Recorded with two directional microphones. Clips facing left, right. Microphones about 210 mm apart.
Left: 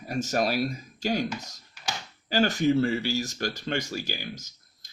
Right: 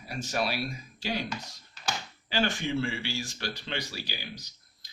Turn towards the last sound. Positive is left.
turn(degrees=45)  # may be behind; listen again after turning